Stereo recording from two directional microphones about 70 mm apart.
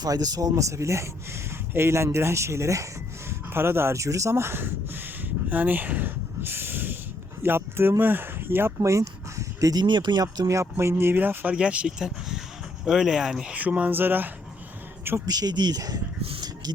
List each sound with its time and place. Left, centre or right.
0.0 s speech: right
5.5 s snort: right
7.4 s speech: right
8.8 s a sound: right
9.7 s speech: right
10.4 s speech: right
11.5 s speech: centre
15.3 s speech: right